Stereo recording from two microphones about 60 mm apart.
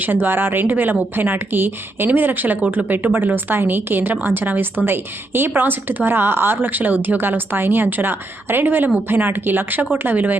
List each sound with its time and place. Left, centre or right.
0.0 s speech: right